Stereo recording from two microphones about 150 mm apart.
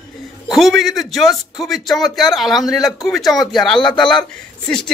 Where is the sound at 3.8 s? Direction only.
30° left (ahead or behind).